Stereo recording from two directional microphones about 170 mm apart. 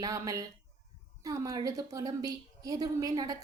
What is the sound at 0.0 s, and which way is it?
A woman's voice, 20° right (ahead or behind).